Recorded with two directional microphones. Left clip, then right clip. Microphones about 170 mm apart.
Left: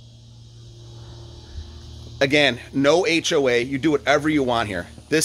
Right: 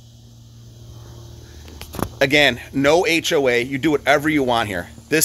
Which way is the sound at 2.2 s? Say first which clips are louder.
Right 2 dB; 10° right (ahead or behind).